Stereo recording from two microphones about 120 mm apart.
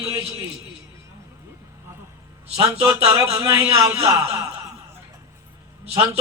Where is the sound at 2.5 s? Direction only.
25° right (ahead or behind).